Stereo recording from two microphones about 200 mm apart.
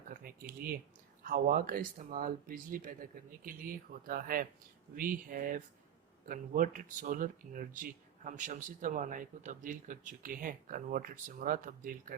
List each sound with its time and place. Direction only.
0.1 s speech: 45° right (ahead or behind)